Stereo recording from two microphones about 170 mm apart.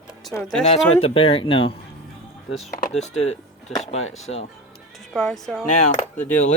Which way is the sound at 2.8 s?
40° left (ahead or behind).